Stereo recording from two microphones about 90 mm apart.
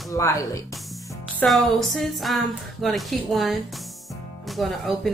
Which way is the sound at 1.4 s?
Centre (ahead or behind).